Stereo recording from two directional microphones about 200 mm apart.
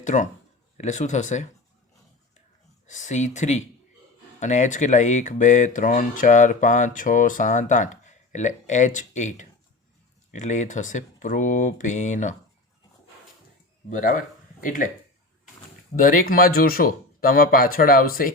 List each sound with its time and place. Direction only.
0.0 s speech: 35° left (ahead or behind)
2.8 s speech: 35° left (ahead or behind)
13.9 s speech: 40° left (ahead or behind)
16.0 s speech: 45° left (ahead or behind)